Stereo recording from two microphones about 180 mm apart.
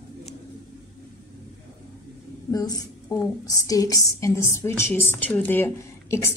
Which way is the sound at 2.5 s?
20° left (ahead or behind).